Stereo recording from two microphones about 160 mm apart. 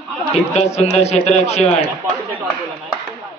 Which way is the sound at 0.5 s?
40° left (ahead or behind).